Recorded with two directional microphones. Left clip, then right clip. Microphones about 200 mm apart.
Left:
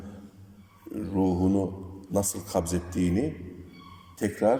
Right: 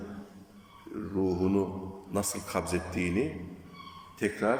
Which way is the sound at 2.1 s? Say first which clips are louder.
Left 4 dB; 30° left (ahead or behind).